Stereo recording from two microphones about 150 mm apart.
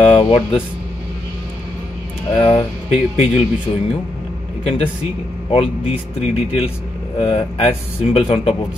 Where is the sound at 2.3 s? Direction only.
35° left (ahead or behind).